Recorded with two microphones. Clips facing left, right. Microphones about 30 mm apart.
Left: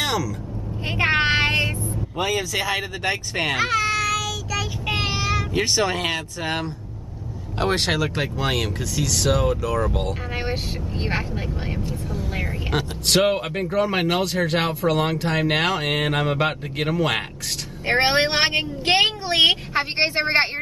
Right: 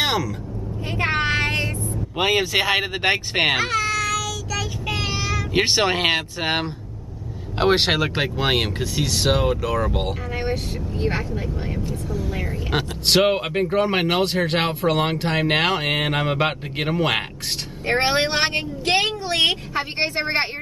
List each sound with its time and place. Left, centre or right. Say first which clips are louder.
0.0 s vehicle: right 2 dB; right
0.8 s vehicle: left 2 dB; left
2.1 s speech: right 4 dB; right
3.5 s baby cry: even; centre
4.8 s child singing: left 2 dB; centre
5.1 s vehicle: left 2 dB; centre
5.5 s speech: right 5 dB; right; by 10.1 s centre
10.3 s speech: right 1 dB; left
11.1 s speech: right 1 dB; left
12.7 s speech: right 2 dB; centre
13.7 s speech: even; right
15.9 s speech: even; centre
17.8 s speech: left 1 dB; centre